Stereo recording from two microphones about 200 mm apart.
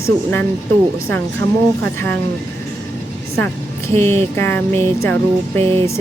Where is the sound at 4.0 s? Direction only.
10° left (ahead or behind).